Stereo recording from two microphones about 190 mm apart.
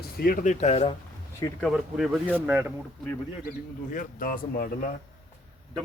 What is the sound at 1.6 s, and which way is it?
Speech, 5° right (ahead or behind).